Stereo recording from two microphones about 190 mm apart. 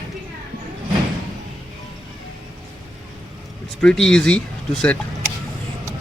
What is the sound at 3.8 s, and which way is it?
Speech, 5° left (ahead or behind).